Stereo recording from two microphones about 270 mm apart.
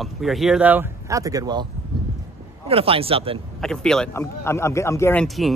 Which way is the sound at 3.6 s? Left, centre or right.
Centre.